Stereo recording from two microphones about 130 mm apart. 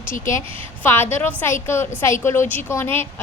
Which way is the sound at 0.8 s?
15° left (ahead or behind).